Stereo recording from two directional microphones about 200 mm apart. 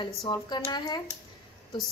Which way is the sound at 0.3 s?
20° left (ahead or behind).